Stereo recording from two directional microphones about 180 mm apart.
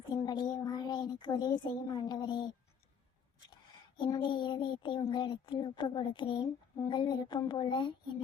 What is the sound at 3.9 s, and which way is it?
Speech, 25° left (ahead or behind).